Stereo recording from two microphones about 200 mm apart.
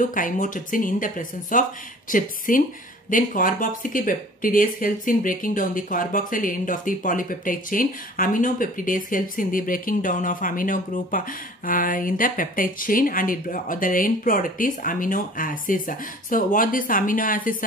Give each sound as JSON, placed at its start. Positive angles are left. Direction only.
{"t": 0.0, "sound": "speech", "side_deg": 40}